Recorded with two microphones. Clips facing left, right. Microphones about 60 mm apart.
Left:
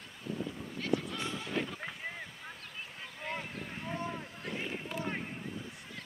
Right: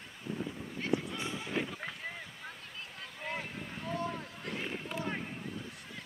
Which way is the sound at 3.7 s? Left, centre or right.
Centre.